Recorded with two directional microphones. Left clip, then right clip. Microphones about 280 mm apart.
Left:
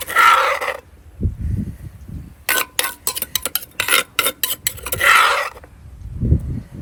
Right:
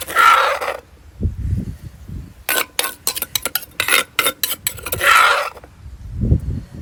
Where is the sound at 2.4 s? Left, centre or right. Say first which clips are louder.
Even; centre.